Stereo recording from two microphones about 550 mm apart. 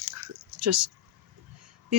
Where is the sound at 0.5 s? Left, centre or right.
Right.